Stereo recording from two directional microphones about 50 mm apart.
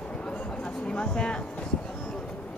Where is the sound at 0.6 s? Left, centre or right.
Left.